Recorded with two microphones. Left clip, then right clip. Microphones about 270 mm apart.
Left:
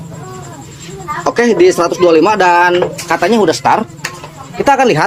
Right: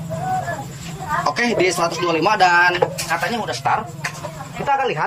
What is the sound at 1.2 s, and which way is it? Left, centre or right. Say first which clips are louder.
Speech: left 10 dB; centre.